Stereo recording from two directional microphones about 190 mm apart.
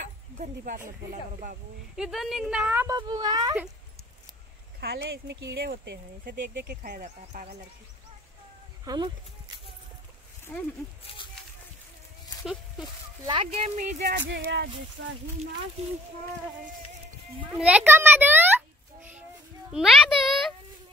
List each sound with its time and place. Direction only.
0.4 s speech: 45° right (ahead or behind)
2.0 s a woman's voice: centre (ahead or behind)
3.0 s a child's voice: 20° right (ahead or behind)
4.7 s speech: 60° right (ahead or behind)
8.8 s speech: 20° right (ahead or behind)
10.5 s speech: 10° left (ahead or behind)
13.2 s a child's voice: 25° right (ahead or behind)
13.7 s speech: 60° right (ahead or behind); by 15.1 s 75° right (ahead or behind)
17.6 s a child's voice: 5° right (ahead or behind)
19.7 s a sound: centre (ahead or behind)